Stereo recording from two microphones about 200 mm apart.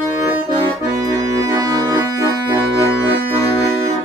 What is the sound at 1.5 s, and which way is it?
Accordion, 15° right (ahead or behind).